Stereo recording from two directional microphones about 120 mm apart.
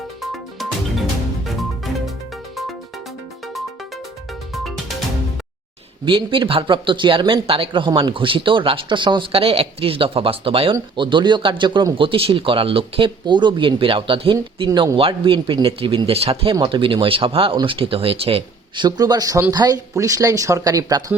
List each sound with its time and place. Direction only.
0.2 s music: centre (ahead or behind)
4.5 s music: centre (ahead or behind)
6.1 s speech: 45° right (ahead or behind)
14.7 s speech: 30° right (ahead or behind)
14.9 s speech: 50° right (ahead or behind)
18.9 s speech: 30° right (ahead or behind)